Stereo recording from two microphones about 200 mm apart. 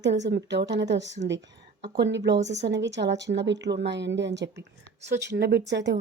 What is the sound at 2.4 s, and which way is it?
Speech, 35° right (ahead or behind).